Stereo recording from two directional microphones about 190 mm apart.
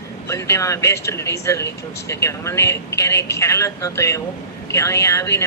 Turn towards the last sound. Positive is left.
turn(degrees=15)  # may be behind; listen again after turning